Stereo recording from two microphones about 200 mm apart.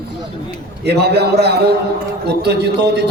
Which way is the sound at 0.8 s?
55° right (ahead or behind).